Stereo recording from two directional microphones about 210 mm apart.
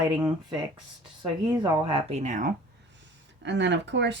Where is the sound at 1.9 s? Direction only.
25° right (ahead or behind).